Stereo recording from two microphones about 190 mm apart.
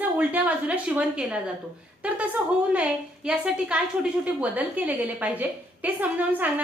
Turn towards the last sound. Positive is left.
turn(degrees=-10)  # may be behind; listen again after turning